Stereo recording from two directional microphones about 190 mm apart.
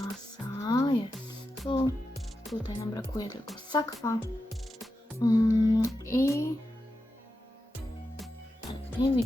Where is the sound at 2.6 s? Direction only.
20° left (ahead or behind).